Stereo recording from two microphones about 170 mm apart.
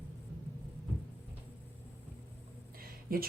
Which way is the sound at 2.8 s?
60° right (ahead or behind).